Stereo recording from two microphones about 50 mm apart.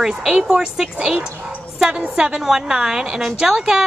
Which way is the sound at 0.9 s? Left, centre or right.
Right.